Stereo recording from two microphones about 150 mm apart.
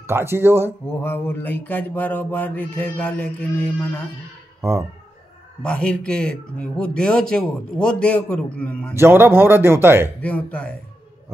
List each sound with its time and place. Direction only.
0.0 s speech: 15° right (ahead or behind)
1.0 s mantra: 15° left (ahead or behind)
4.6 s speech: 15° right (ahead or behind)
5.6 s a man's voice: 5° left (ahead or behind)
8.9 s speech: 15° right (ahead or behind)
10.2 s mantra: 10° left (ahead or behind)